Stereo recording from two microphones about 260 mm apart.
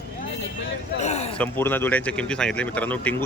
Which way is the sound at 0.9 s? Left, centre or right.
Left.